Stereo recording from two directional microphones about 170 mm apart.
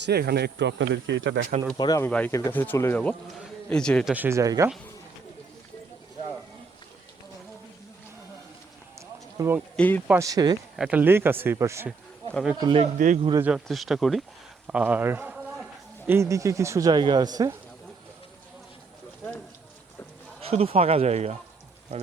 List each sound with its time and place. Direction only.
0.0 s speech: 70° right (ahead or behind); by 1.4 s 90° right
1.8 s speech: 20° left (ahead or behind)
2.0 s speech: 10° left (ahead or behind)
4.1 s speech: 15° right (ahead or behind)
9.0 s run: 15° right (ahead or behind)
9.7 s speech: 10° left (ahead or behind)
10.1 s speech: 20° right (ahead or behind)
10.8 s speech: 5° right (ahead or behind); by 12.8 s 25° right (ahead or behind)
12.8 s speech: 45° right (ahead or behind)
13.4 s a man's voice: centre (ahead or behind); by 17.6 s 20° right (ahead or behind)
20.5 s speech: 35° right (ahead or behind)